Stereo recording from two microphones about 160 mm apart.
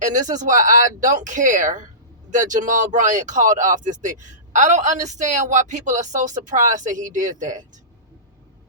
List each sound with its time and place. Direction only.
0.3 s a woman's voice: 55° right (ahead or behind)